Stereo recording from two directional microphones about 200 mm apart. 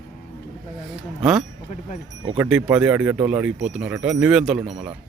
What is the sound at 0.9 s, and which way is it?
Speech, centre (ahead or behind).